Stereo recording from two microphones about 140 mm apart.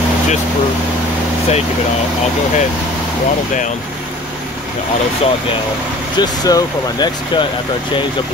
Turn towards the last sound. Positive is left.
turn(degrees=30)  # may be behind; listen again after turning